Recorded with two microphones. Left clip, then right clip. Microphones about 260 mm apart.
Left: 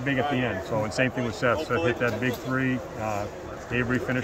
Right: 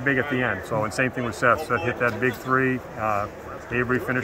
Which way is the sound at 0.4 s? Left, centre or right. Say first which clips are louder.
Right 3 dB; centre.